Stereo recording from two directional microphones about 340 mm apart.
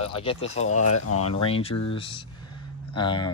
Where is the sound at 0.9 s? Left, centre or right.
Left.